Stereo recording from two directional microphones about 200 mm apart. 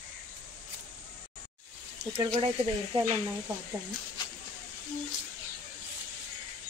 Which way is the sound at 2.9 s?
25° right (ahead or behind).